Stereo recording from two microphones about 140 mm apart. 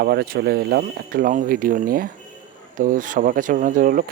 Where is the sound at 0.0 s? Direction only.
90° right.